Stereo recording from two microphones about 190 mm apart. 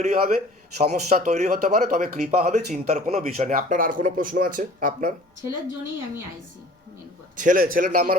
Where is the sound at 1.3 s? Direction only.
35° right (ahead or behind).